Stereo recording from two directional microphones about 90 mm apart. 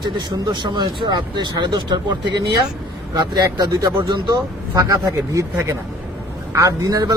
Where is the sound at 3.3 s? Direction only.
50° right (ahead or behind).